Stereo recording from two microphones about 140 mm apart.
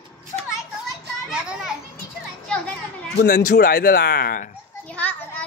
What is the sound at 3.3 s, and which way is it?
Speech, 90° left.